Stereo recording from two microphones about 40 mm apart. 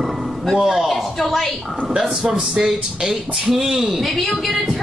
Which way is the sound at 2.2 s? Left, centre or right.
Right.